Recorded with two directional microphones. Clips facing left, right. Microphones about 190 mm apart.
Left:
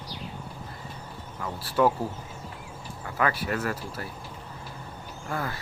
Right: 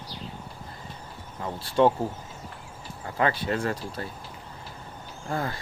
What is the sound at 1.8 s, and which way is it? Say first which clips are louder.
Speech: right 2 dB; 25° right (ahead or behind).